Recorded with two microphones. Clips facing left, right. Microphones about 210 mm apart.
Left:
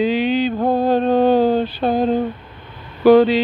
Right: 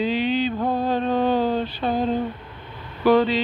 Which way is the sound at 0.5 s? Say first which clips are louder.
Left 6 dB; 40° left (ahead or behind).